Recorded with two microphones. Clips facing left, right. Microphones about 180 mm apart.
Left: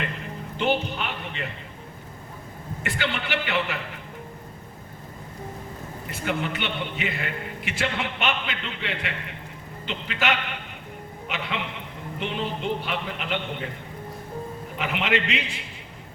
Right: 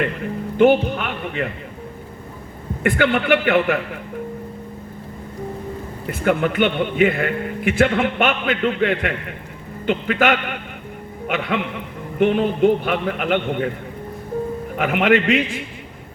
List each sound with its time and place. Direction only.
0.5 s a man's voice: 50° right (ahead or behind)
2.8 s a man's voice: 55° right (ahead or behind)
6.1 s a man's voice: 55° right (ahead or behind)
14.8 s a man's voice: 50° right (ahead or behind)